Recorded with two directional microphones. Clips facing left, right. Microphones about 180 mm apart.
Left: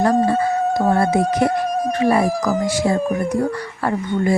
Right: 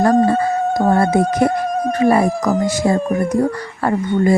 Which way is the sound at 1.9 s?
45° right (ahead or behind).